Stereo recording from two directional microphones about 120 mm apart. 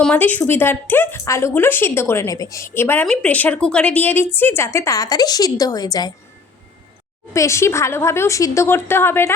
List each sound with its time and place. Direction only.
0.0 s speech: 15° left (ahead or behind); by 6.1 s 35° left (ahead or behind)
7.3 s speech: 25° left (ahead or behind)